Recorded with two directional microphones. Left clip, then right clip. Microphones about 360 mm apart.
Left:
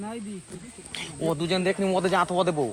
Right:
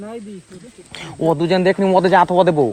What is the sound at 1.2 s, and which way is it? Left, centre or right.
Speech, right.